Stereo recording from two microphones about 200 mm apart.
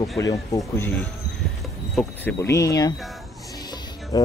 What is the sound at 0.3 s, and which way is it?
Speech, 15° left (ahead or behind).